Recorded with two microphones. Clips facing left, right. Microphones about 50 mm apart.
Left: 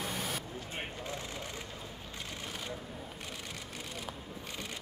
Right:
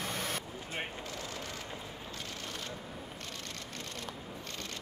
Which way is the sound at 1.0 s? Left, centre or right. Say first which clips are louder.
Left 1 dB; left.